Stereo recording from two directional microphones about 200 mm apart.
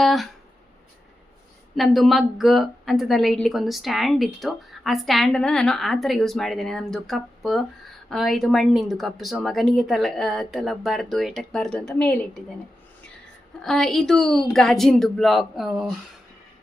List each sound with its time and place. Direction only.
0.0 s speech: centre (ahead or behind)
1.7 s a woman's voice: centre (ahead or behind)
13.6 s a woman's voice: centre (ahead or behind)